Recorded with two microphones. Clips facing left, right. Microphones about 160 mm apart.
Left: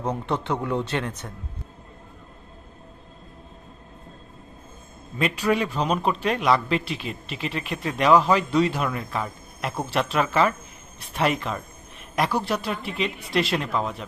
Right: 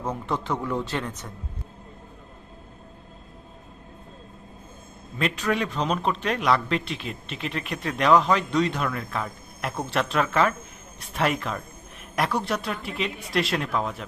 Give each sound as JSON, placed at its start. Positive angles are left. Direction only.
{"t": 0.0, "sound": "a man's voice", "side_deg": 20}
{"t": 5.1, "sound": "a man's voice", "side_deg": 10}